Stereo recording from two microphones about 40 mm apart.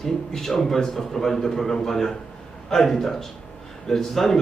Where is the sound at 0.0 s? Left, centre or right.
Centre.